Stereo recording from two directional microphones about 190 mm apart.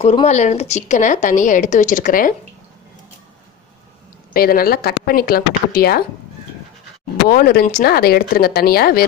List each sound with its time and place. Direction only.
0.0 s a woman's voice: 35° left (ahead or behind)
4.3 s a woman's voice: 50° left (ahead or behind)
7.2 s a woman's voice: 55° left (ahead or behind)